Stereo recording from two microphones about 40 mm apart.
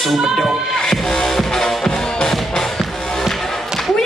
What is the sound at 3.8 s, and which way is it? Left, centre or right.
Thump, centre.